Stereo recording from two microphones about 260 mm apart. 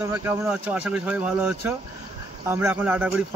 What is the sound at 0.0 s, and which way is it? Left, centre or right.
Speech, centre.